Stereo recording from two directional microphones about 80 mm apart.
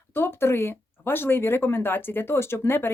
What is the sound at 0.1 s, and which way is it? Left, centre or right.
Speech, left.